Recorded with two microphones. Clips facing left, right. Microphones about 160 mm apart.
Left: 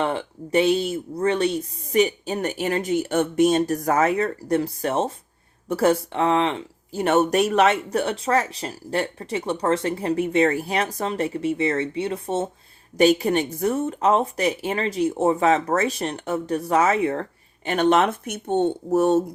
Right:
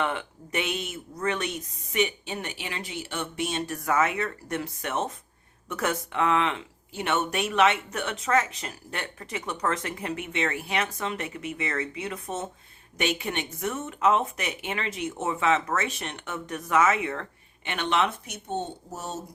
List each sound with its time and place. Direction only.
0.0 s speech: 35° left (ahead or behind); by 19.2 s 60° left (ahead or behind)